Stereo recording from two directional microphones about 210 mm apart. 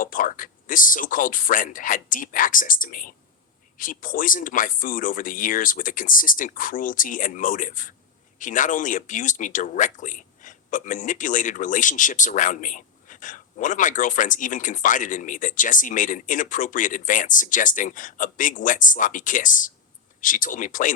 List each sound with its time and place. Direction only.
0.0 s speech: 40° left (ahead or behind)